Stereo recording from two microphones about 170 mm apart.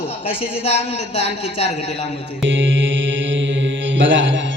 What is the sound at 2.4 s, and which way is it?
Mantra, 90° right.